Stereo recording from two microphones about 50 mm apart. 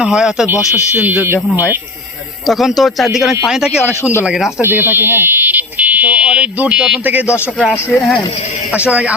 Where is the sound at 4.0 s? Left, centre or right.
Left.